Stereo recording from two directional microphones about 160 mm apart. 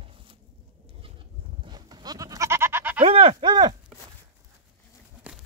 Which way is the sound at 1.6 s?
25° right (ahead or behind).